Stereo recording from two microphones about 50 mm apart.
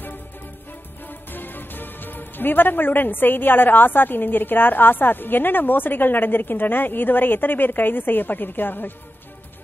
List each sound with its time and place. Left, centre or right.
1.3 s speech: left